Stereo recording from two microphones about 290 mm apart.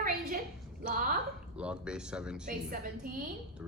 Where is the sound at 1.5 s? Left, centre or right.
Centre.